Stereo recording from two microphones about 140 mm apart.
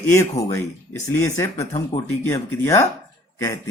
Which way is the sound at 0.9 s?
20° left (ahead or behind).